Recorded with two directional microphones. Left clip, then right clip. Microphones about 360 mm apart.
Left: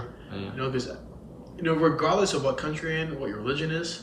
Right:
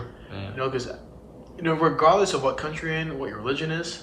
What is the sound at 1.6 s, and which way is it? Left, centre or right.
A man's voice, centre.